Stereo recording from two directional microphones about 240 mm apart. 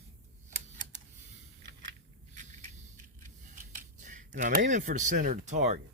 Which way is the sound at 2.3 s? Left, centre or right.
Right.